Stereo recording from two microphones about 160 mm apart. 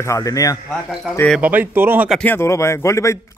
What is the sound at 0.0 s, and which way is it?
Speech, 20° left (ahead or behind).